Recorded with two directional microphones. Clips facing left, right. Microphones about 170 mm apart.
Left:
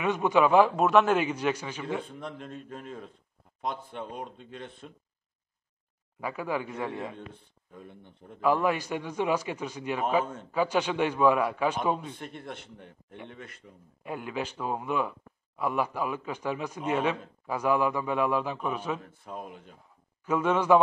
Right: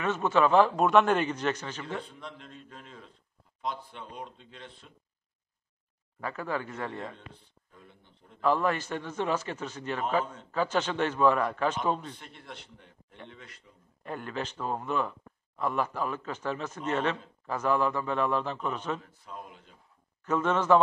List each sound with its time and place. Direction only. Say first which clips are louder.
0.0 s speech: left 2 dB; 15° left (ahead or behind)
2.0 s speech: left 6 dB; 50° left (ahead or behind)
6.2 s speech: left 2 dB; 10° left (ahead or behind)
7.7 s speech: left 9 dB; 55° left (ahead or behind)
8.4 s speech: left 1 dB; 10° left (ahead or behind)
12.2 s speech: left 7 dB; 55° left (ahead or behind)
14.0 s speech: left 2 dB; 10° left (ahead or behind)
19.0 s speech: left 4 dB; 55° left (ahead or behind)
20.2 s speech: left 1 dB; 10° left (ahead or behind)